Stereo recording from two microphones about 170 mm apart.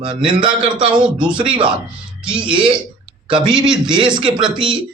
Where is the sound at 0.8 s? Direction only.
5° right (ahead or behind).